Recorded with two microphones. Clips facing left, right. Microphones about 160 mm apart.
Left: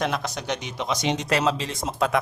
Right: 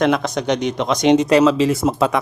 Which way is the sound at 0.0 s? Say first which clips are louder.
Right 9 dB; 90° right.